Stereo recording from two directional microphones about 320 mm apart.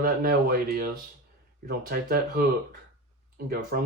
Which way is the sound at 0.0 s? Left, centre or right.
Right.